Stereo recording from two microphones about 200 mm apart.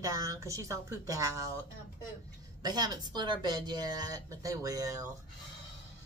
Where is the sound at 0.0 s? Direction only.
15° right (ahead or behind).